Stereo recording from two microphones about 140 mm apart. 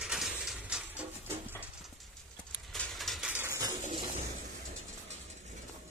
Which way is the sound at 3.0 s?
Centre (ahead or behind).